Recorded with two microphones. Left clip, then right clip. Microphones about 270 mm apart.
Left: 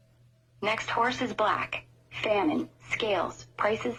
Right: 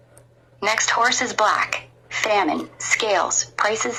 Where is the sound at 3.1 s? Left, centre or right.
Centre.